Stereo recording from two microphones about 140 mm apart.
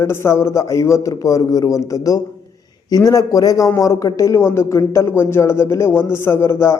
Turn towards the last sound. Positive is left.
turn(degrees=20)  # may be behind; listen again after turning